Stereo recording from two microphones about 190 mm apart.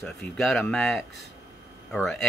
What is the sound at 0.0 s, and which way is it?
Speech, centre (ahead or behind).